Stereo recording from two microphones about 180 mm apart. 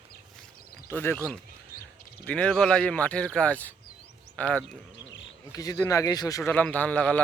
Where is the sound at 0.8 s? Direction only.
10° left (ahead or behind).